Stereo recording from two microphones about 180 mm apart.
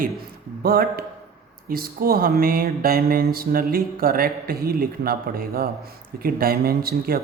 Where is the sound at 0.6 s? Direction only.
55° right (ahead or behind).